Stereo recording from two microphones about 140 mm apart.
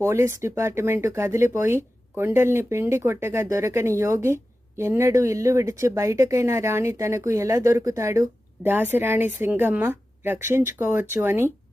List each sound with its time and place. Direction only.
0.0 s speech: 20° right (ahead or behind)